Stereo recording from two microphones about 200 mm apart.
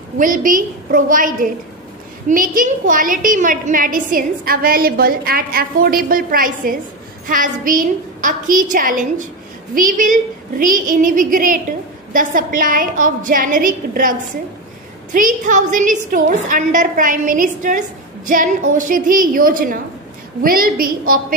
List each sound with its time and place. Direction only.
0.2 s a woman's voice: 40° right (ahead or behind)
15.1 s a woman's voice: 40° right (ahead or behind)